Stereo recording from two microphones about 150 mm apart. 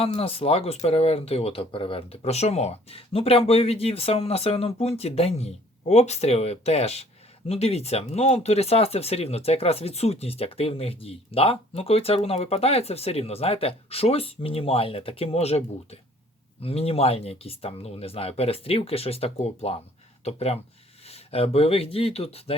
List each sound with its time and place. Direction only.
0.0 s speech: 40° left (ahead or behind)